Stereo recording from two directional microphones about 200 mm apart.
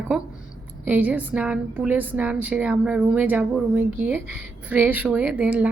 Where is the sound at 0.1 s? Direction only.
5° right (ahead or behind).